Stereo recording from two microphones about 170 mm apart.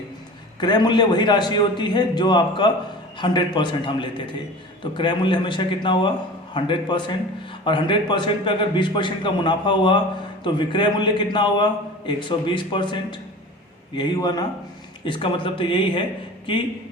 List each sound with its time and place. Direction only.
0.6 s a man's voice: 25° left (ahead or behind)